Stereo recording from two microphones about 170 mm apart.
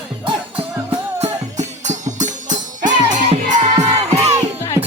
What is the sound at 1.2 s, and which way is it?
Music, 40° right (ahead or behind).